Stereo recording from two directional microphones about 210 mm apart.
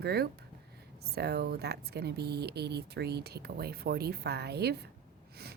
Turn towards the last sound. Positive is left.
turn(degrees=-50)  # may be behind; listen again after turning